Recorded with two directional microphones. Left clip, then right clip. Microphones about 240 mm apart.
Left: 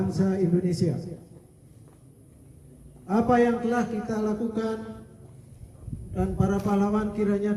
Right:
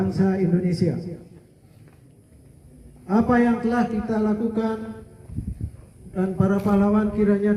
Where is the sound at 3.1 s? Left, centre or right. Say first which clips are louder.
Right 1 dB; left.